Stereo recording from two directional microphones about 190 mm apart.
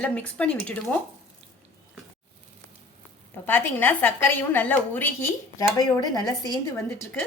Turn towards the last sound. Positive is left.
turn(degrees=5)  # may be behind; listen again after turning